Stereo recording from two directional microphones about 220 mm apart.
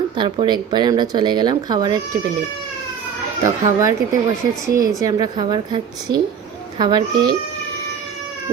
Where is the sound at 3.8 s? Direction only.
15° right (ahead or behind).